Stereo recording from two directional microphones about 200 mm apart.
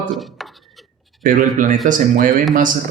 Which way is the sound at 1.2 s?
40° right (ahead or behind).